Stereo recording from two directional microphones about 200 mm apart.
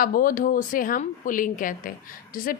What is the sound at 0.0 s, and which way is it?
A woman's voice, 45° left (ahead or behind).